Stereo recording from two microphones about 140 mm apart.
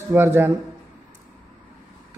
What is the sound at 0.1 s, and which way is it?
Speech, 15° right (ahead or behind).